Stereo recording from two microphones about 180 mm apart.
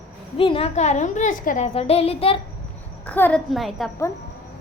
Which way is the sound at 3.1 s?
10° left (ahead or behind).